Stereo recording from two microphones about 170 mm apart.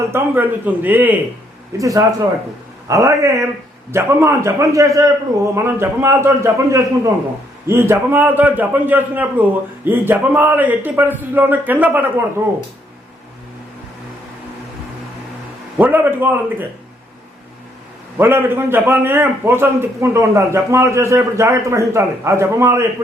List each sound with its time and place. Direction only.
0.1 s a man's voice: 10° right (ahead or behind)
15.8 s a man's voice: 10° right (ahead or behind)
18.2 s a man's voice: 15° right (ahead or behind)